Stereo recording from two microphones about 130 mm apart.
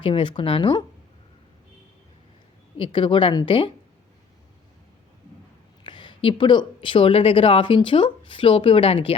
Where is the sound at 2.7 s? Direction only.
40° left (ahead or behind).